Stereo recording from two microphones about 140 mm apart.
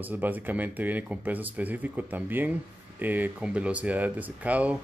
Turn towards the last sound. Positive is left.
turn(degrees=-10)  # may be behind; listen again after turning